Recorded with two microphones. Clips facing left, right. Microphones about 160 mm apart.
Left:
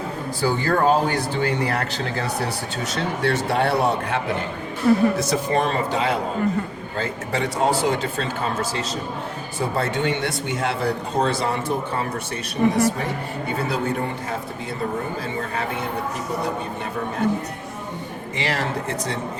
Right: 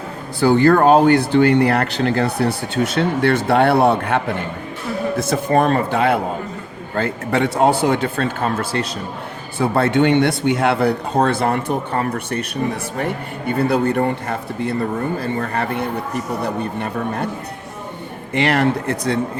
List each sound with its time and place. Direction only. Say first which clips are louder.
0.4 s speech: right 7 dB; 65° right (ahead or behind)
4.9 s speech: left 9 dB; 50° left (ahead or behind)
5.2 s a man's voice: right 5 dB; 50° right (ahead or behind)
9.6 s speech: right 8 dB; 60° right (ahead or behind)
18.3 s speech: right 9 dB; 60° right (ahead or behind)